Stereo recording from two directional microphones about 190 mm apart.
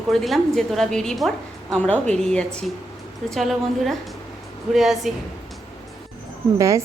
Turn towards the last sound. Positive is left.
turn(degrees=-15)  # may be behind; listen again after turning